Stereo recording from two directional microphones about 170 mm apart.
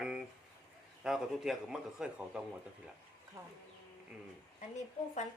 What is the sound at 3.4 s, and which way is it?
Speech, 20° right (ahead or behind).